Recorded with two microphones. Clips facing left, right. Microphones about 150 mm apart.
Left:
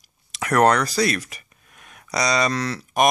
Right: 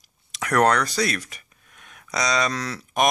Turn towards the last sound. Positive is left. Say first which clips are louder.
# left 3 dB
turn(degrees=0)  # may be behind; listen again after turning